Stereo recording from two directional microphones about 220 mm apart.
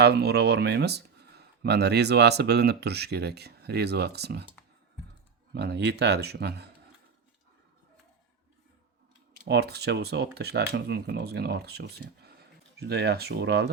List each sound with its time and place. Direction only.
0.0 s speech: 50° right (ahead or behind)
5.5 s speech: 50° right (ahead or behind)
9.5 s speech: 45° right (ahead or behind)